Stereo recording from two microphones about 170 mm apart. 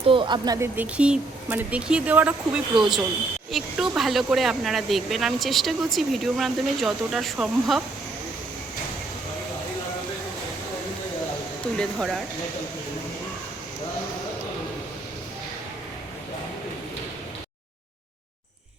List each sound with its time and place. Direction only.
0.1 s speech: 30° right (ahead or behind)
0.8 s speech: 5° right (ahead or behind)
11.8 s speech: centre (ahead or behind)